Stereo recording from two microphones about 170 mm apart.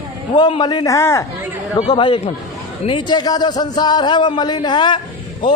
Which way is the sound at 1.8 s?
30° left (ahead or behind).